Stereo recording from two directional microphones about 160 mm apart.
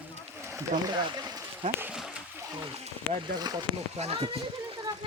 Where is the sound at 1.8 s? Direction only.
10° right (ahead or behind).